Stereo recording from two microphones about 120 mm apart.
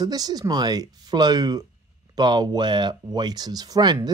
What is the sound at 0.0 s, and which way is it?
Speech, 35° right (ahead or behind).